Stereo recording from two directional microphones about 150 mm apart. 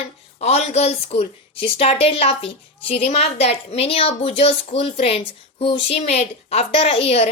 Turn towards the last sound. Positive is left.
turn(degrees=40)  # may be behind; listen again after turning